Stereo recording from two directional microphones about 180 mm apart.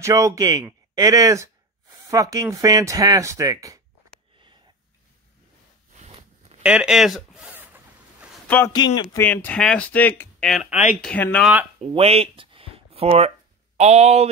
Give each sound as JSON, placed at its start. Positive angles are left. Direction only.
{"t": 0.0, "sound": "speech", "side_deg": -20}
{"t": 5.9, "sound": "a sound", "side_deg": -35}
{"t": 6.6, "sound": "speech", "side_deg": -5}
{"t": 7.5, "sound": "zipper", "side_deg": -10}
{"t": 8.5, "sound": "speech", "side_deg": 10}
{"t": 8.7, "sound": "speech", "side_deg": 25}
{"t": 9.1, "sound": "speech", "side_deg": 10}
{"t": 10.5, "sound": "speech", "side_deg": 0}
{"t": 11.8, "sound": "speech", "side_deg": -35}